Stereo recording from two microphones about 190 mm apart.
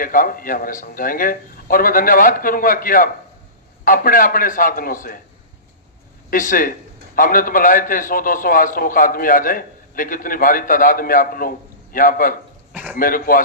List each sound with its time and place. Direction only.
0.0 s a man's voice: 45° left (ahead or behind)
6.3 s a man's voice: 45° left (ahead or behind)
12.7 s a sound: 5° right (ahead or behind)
13.0 s a man's voice: 45° left (ahead or behind)